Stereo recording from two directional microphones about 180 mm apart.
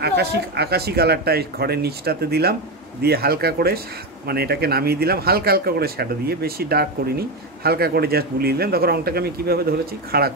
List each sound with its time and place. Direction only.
0.0 s speech: 65° right (ahead or behind)